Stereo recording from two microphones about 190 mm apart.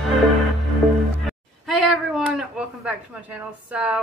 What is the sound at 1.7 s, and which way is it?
Speech, centre (ahead or behind).